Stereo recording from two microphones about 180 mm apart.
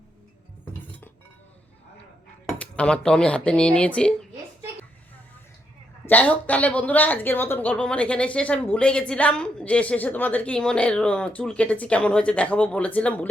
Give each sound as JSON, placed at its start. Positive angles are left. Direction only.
{"t": 2.5, "sound": "speech", "side_deg": 5}
{"t": 6.1, "sound": "speech", "side_deg": 10}